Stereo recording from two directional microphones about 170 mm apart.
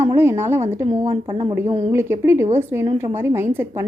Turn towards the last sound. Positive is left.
turn(degrees=-15)  # may be behind; listen again after turning